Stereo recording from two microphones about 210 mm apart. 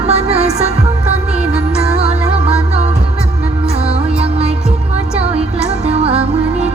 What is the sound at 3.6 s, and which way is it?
Music, 30° right (ahead or behind).